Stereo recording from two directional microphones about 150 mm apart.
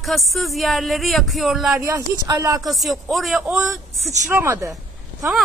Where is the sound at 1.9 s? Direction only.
25° right (ahead or behind).